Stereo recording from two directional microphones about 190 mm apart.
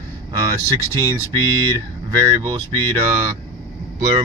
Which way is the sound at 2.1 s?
20° right (ahead or behind).